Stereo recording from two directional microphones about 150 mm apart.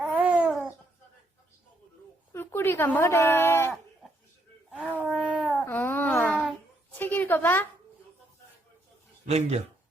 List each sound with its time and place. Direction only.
0.0 s babbling: 10° right (ahead or behind)
2.3 s a woman's voice: 15° left (ahead or behind)
4.7 s a sound: 10° right (ahead or behind)
5.6 s babbling: 15° left (ahead or behind)
6.9 s a sound: 15° left (ahead or behind)
9.2 s speech: 45° right (ahead or behind)